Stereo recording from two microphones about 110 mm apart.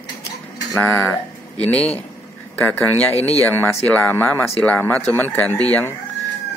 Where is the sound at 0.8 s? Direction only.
15° left (ahead or behind).